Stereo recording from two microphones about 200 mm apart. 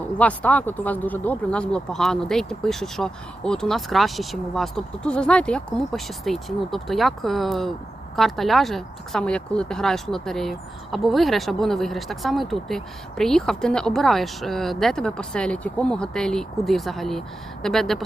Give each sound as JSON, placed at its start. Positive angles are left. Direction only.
{"t": 0.2, "sound": "speech", "side_deg": 5}